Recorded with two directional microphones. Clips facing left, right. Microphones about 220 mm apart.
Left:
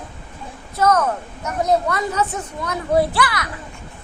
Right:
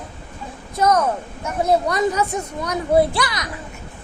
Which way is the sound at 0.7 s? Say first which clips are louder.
Even; 15° right (ahead or behind).